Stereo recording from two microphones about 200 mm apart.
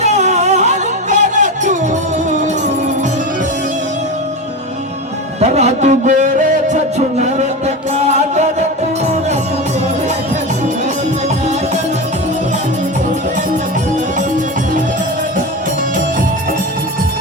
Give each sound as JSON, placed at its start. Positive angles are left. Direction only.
{"t": 0.0, "sound": "music", "side_deg": -35}
{"t": 5.4, "sound": "a sound", "side_deg": -35}
{"t": 7.9, "sound": "music", "side_deg": -35}